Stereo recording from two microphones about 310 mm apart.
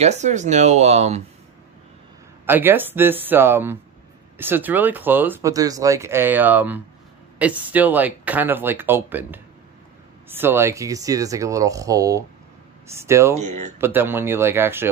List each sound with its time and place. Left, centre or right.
0.0 s speech: right
2.4 s speech: centre
13.4 s speech: right
13.7 s speech: centre